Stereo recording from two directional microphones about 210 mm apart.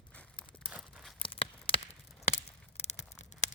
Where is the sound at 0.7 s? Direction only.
Centre (ahead or behind).